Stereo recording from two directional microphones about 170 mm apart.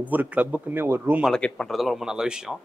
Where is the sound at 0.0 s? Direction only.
10° right (ahead or behind).